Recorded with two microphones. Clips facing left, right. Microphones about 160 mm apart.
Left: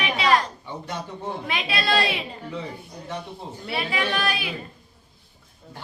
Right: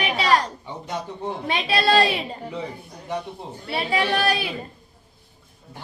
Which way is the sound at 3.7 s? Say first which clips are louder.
Right 4 dB; 35° right (ahead or behind).